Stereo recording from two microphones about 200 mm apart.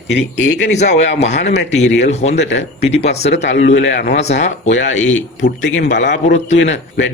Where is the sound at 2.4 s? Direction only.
65° left (ahead or behind).